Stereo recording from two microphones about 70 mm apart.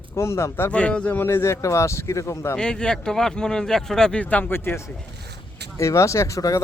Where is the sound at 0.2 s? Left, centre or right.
Left.